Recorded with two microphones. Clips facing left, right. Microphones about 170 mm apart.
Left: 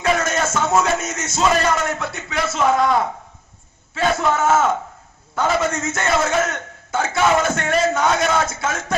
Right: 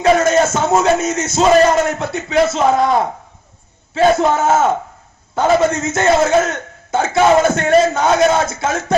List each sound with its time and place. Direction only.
0.0 s music: 35° right (ahead or behind)
0.7 s a man's voice: 35° right (ahead or behind)